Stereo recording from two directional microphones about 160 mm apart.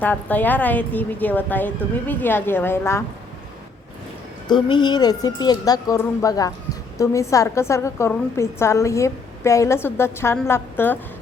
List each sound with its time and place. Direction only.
0.0 s a woman's voice: 10° left (ahead or behind)
4.4 s a woman's voice: 30° left (ahead or behind)